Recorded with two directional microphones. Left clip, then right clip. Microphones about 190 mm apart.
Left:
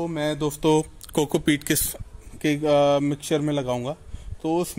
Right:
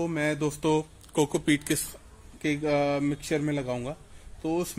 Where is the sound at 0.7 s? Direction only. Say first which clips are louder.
Left 5 dB; 45° left (ahead or behind).